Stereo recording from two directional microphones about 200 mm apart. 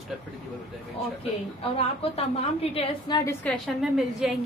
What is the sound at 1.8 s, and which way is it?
A woman's voice, 30° left (ahead or behind).